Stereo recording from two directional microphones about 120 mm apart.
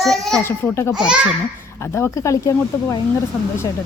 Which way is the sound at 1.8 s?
20° left (ahead or behind).